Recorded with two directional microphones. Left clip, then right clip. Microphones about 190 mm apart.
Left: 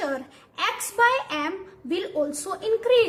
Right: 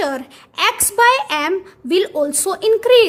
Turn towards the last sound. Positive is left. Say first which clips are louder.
# right 8 dB
turn(degrees=-55)  # may be behind; listen again after turning